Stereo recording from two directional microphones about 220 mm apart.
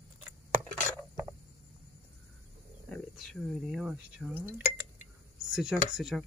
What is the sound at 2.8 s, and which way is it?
Speech, centre (ahead or behind).